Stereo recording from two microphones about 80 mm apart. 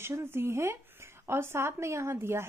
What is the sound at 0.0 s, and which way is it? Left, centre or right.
Speech, right.